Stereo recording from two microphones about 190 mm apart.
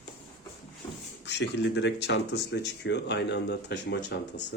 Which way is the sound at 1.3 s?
65° left (ahead or behind).